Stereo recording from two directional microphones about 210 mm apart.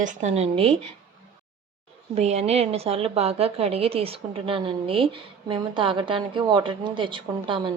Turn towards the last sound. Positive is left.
turn(degrees=-20)  # may be behind; listen again after turning